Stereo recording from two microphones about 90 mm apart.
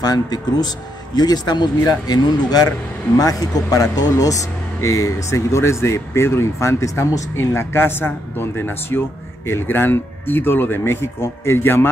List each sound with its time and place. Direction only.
0.0 s speech: 45° left (ahead or behind); by 11.9 s 25° left (ahead or behind)